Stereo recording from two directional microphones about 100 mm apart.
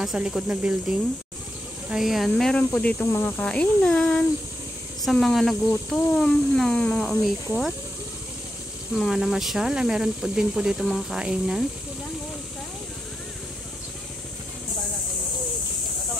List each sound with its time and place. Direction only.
0.0 s speech: 5° right (ahead or behind)
2.7 s speech: 15° left (ahead or behind)
3.1 s snake: 25° left (ahead or behind)
3.3 s speech: 10° left (ahead or behind)
8.9 s speech: 5° right (ahead or behind)